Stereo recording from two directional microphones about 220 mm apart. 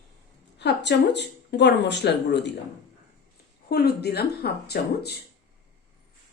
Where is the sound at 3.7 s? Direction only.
45° left (ahead or behind).